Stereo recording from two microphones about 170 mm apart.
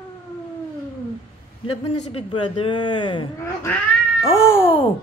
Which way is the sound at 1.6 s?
30° left (ahead or behind).